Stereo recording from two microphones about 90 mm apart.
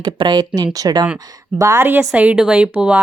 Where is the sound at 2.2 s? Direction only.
15° right (ahead or behind).